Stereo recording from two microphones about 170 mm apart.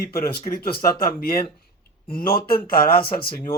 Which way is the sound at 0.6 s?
60° left (ahead or behind).